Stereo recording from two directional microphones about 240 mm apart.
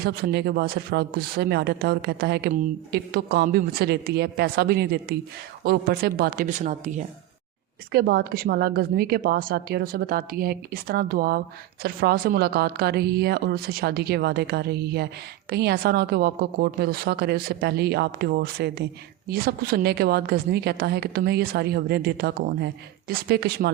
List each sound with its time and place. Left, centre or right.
0.0 s a woman's voice: right